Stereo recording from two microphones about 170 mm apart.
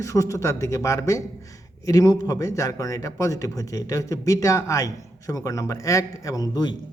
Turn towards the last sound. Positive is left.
turn(degrees=20)  # may be behind; listen again after turning